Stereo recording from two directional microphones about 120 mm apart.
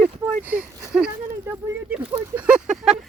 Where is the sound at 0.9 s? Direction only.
10° right (ahead or behind).